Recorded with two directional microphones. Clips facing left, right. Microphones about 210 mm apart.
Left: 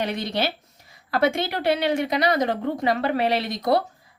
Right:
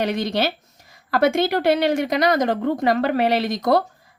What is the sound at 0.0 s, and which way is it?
A woman's voice, 45° right (ahead or behind).